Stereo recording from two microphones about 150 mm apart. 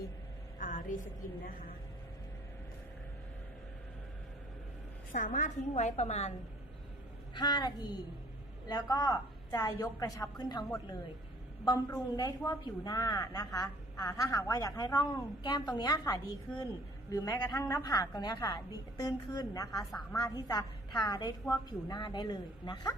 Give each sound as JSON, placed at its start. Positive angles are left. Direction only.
{"t": 0.6, "sound": "a woman's voice", "side_deg": 60}
{"t": 5.1, "sound": "a woman's voice", "side_deg": 60}
{"t": 7.3, "sound": "a woman's voice", "side_deg": 30}
{"t": 21.9, "sound": "a woman's voice", "side_deg": 30}